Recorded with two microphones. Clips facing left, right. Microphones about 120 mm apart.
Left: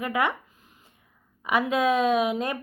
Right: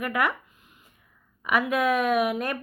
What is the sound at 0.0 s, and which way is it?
Speech, 20° left (ahead or behind).